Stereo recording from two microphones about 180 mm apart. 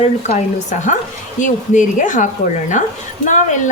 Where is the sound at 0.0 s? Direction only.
40° left (ahead or behind).